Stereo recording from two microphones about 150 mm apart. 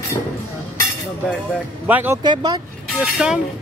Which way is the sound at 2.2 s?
30° right (ahead or behind).